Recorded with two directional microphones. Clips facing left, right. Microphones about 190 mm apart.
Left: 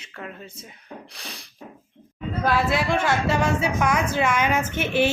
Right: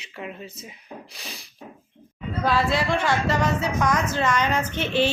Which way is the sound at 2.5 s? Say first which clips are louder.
Even; 5° left (ahead or behind).